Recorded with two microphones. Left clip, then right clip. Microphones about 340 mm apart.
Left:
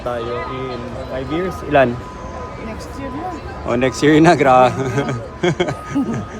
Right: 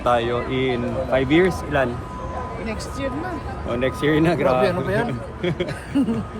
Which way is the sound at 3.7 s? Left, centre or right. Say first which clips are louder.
Left 7 dB; left.